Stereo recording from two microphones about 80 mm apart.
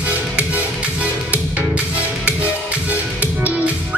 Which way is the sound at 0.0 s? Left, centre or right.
Centre.